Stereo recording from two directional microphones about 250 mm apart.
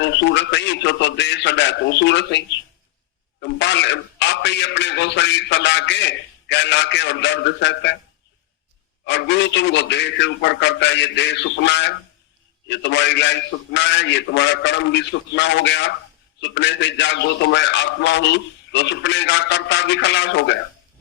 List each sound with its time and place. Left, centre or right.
0.0 s a man's voice: left
9.0 s a man's voice: left